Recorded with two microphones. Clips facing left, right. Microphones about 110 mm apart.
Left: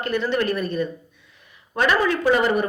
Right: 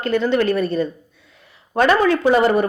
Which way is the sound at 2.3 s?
30° right (ahead or behind).